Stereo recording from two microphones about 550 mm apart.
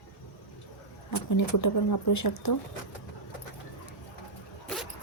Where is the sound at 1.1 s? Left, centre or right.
Left.